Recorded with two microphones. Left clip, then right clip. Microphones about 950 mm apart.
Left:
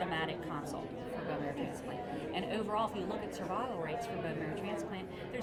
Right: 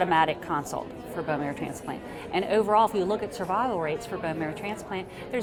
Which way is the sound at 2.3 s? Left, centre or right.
Right.